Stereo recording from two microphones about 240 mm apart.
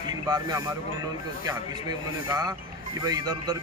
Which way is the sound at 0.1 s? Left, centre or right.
Centre.